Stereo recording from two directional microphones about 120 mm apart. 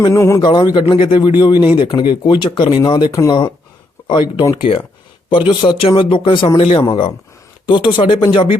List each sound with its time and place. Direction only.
0.1 s speech: 25° left (ahead or behind)
0.4 s speech: 35° left (ahead or behind)
3.1 s speech: 25° left (ahead or behind)
4.0 s speech: 40° left (ahead or behind)